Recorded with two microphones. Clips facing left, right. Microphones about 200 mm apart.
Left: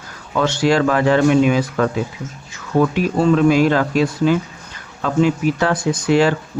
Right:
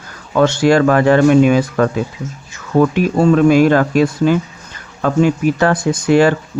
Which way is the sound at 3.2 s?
50° right (ahead or behind).